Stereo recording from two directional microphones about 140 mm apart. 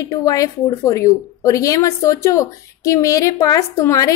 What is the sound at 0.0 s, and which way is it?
A woman's voice, 25° left (ahead or behind).